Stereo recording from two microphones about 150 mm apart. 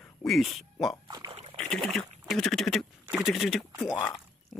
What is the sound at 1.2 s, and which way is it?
Splash, 40° right (ahead or behind).